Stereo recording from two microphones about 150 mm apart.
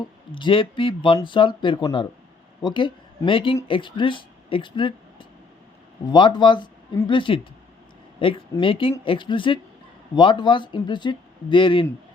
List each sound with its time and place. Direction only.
0.0 s speech: 30° left (ahead or behind)